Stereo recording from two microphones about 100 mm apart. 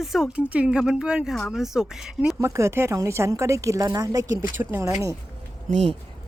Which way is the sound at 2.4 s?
30° right (ahead or behind).